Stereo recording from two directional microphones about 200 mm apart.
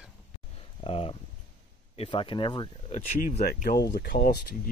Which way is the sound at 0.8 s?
30° left (ahead or behind).